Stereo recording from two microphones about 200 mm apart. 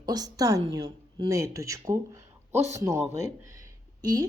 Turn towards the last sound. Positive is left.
turn(degrees=-20)  # may be behind; listen again after turning